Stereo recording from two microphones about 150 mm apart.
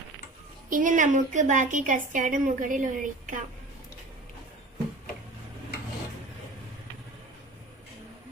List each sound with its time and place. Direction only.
0.7 s a woman's voice: 60° right (ahead or behind)